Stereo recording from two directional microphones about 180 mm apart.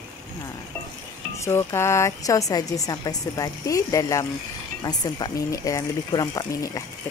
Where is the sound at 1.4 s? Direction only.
15° left (ahead or behind).